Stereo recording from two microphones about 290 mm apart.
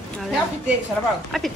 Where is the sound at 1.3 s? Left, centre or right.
Centre.